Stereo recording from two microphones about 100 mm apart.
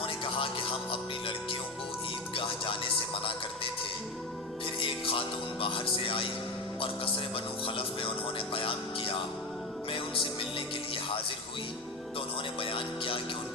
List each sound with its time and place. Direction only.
0.0 s music: 65° left (ahead or behind)
2.3 s music: 60° left (ahead or behind)
12.5 s music: 60° left (ahead or behind)